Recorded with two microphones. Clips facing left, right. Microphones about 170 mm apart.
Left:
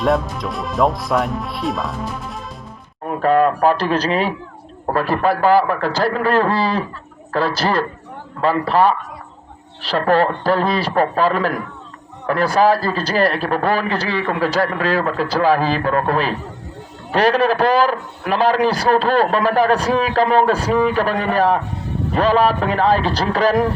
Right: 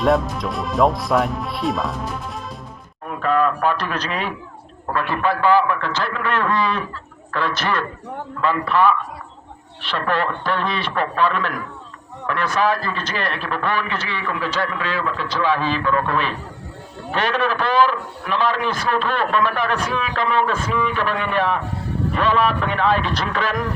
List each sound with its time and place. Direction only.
0.0 s speech: centre (ahead or behind)
3.1 s a man's voice: 40° left (ahead or behind)